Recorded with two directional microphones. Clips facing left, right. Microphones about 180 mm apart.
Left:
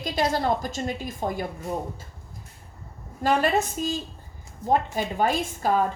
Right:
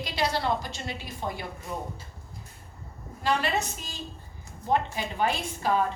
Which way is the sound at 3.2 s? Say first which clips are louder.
Left 5 dB; 45° left (ahead or behind).